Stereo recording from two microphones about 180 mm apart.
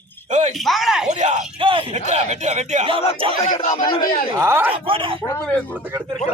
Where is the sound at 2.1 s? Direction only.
40° right (ahead or behind).